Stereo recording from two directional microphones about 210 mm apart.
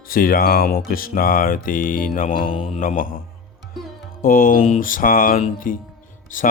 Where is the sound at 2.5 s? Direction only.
25° left (ahead or behind).